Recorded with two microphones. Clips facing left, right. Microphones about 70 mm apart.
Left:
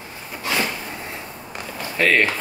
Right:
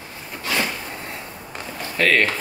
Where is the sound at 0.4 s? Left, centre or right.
Centre.